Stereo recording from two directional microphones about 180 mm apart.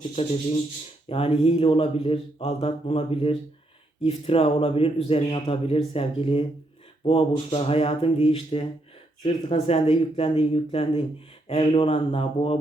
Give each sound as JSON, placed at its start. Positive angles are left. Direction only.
{"t": 1.0, "sound": "speech", "side_deg": 30}